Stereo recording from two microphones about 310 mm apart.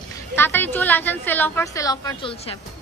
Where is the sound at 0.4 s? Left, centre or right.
Centre.